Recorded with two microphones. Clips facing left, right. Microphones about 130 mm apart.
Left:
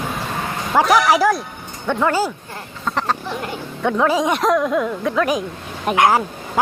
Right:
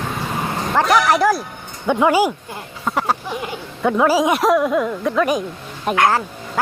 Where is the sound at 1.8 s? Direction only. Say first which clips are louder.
Right 3 dB; 15° right (ahead or behind).